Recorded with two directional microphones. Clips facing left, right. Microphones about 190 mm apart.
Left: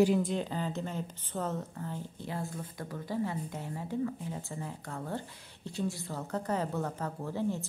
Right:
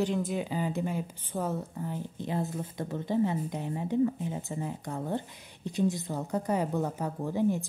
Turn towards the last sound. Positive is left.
turn(degrees=-15)  # may be behind; listen again after turning